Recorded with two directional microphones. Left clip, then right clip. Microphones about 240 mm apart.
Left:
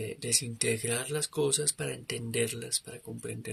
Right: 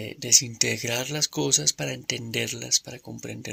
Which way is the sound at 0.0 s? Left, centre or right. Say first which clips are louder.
Right 10 dB; right.